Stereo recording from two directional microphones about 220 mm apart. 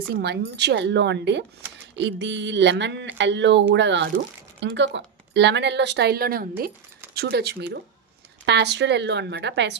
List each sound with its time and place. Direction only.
0.2 s speech: 50° right (ahead or behind)